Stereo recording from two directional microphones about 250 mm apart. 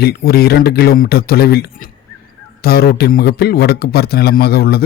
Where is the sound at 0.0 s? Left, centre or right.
Left.